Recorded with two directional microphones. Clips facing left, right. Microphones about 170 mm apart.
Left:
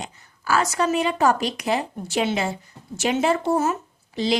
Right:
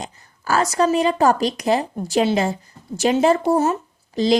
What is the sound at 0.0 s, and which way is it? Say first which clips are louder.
Speech: right 2 dB; 40° right (ahead or behind).